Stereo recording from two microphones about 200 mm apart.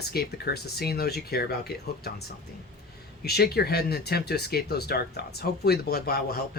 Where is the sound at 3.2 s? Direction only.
55° left (ahead or behind).